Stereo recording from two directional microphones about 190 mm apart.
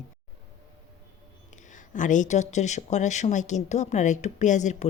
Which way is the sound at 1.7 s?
40° left (ahead or behind).